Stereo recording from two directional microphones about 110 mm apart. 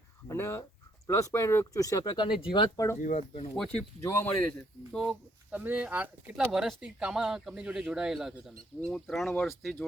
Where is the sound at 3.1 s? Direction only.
80° left.